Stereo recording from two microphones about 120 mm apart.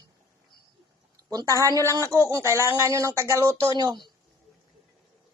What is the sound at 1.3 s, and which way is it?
Speech, 30° right (ahead or behind).